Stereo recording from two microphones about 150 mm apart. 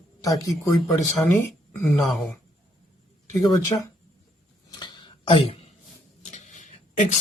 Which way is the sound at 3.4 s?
20° left (ahead or behind).